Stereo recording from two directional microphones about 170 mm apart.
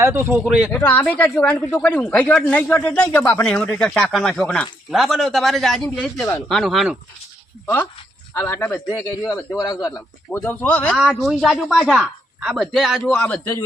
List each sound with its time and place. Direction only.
0.0 s speech: 15° right (ahead or behind)
0.7 s a man's voice: 10° left (ahead or behind)
8.3 s a man's voice: 15° left (ahead or behind)